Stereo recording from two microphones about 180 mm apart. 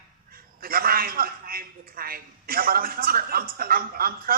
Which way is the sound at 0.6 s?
55° right (ahead or behind).